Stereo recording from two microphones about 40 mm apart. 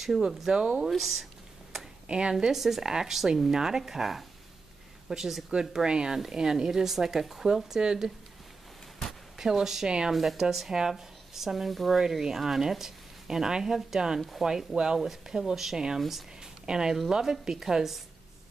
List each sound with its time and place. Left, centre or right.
0.5 s speech: right
0.8 s speech: centre
2.0 s speech: right
2.5 s speech: centre
9.4 s speech: centre
9.8 s speech: right
10.1 s speech: centre
16.6 s speech: centre